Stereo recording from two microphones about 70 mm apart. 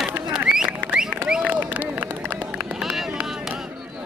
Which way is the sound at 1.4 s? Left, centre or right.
Right.